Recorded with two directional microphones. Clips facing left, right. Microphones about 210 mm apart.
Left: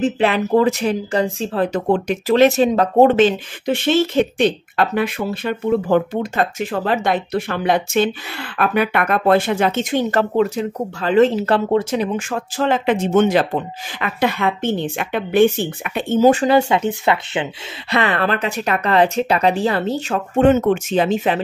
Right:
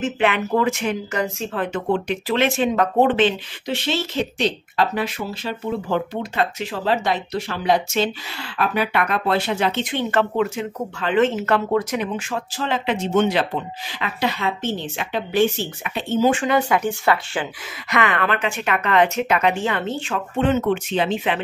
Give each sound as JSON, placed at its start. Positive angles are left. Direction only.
{"t": 0.0, "sound": "speech", "side_deg": 35}
{"t": 12.2, "sound": "speech", "side_deg": 50}
{"t": 17.9, "sound": "speech", "side_deg": 35}